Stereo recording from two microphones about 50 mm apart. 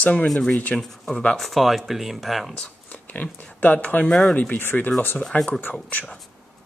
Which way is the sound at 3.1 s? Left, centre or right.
Left.